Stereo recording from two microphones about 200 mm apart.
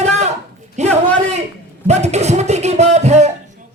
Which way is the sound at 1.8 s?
35° right (ahead or behind).